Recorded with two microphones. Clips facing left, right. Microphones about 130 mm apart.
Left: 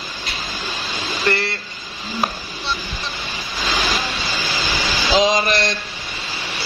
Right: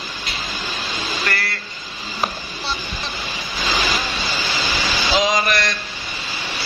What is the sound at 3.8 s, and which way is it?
Vehicle, centre (ahead or behind).